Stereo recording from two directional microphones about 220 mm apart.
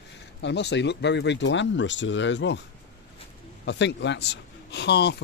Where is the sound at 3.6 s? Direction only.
55° left (ahead or behind).